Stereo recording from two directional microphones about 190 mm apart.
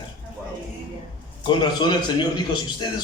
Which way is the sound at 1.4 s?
25° left (ahead or behind).